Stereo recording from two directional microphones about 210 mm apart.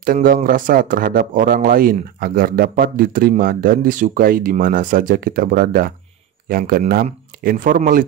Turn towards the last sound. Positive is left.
turn(degrees=-40)  # may be behind; listen again after turning